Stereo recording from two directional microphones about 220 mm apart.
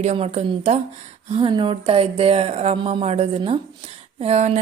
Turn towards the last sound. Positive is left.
turn(degrees=-30)  # may be behind; listen again after turning